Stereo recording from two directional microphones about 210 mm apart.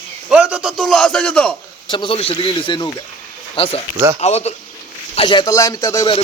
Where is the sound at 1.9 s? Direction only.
25° left (ahead or behind).